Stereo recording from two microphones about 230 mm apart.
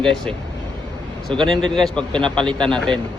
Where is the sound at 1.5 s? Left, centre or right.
Centre.